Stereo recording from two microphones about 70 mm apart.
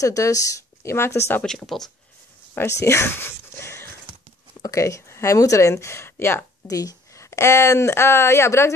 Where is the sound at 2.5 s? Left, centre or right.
Left.